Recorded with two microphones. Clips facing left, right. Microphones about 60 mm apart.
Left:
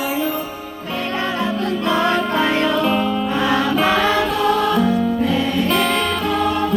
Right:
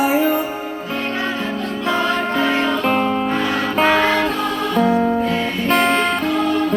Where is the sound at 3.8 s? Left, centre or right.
Right.